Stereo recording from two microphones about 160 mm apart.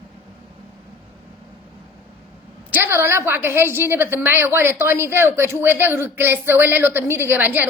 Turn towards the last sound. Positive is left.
turn(degrees=-10)  # may be behind; listen again after turning